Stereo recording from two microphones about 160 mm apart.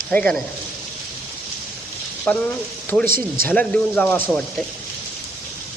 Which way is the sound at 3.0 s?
65° right (ahead or behind).